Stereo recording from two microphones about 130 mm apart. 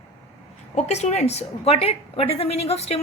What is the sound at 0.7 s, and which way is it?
A woman's voice, 60° left (ahead or behind).